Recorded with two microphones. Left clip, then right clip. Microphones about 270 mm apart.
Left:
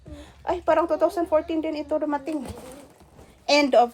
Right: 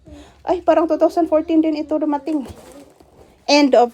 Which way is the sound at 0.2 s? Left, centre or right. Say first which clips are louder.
Right 7 dB; right.